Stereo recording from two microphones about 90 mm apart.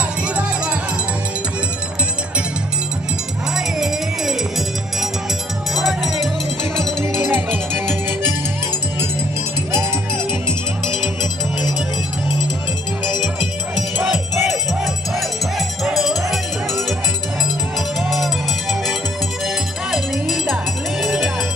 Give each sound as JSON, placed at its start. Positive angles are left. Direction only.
{"t": 3.5, "sound": "music", "side_deg": -5}
{"t": 5.8, "sound": "music", "side_deg": 0}
{"t": 7.2, "sound": "music", "side_deg": -25}
{"t": 14.0, "sound": "crowd", "side_deg": -5}
{"t": 15.8, "sound": "music", "side_deg": 0}
{"t": 18.0, "sound": "music", "side_deg": 0}